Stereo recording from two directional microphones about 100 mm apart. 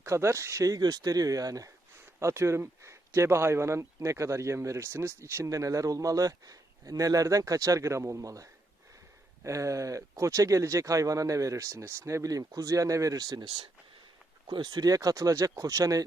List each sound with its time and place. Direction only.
0.0 s speech: 30° right (ahead or behind)